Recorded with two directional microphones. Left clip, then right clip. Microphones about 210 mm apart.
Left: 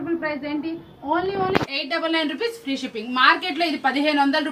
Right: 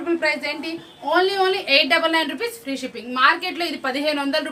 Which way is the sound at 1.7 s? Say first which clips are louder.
Right 7 dB; 35° right (ahead or behind).